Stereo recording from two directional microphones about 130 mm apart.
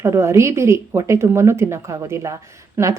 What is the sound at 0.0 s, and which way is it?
Speech, 20° right (ahead or behind).